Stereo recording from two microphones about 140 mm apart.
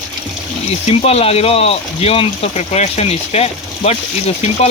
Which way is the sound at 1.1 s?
45° left (ahead or behind).